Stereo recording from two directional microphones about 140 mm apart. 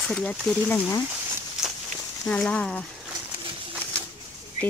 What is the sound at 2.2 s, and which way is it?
Speech, 5° left (ahead or behind).